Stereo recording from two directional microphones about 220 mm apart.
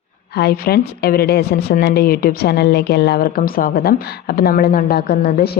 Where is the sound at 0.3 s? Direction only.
45° left (ahead or behind).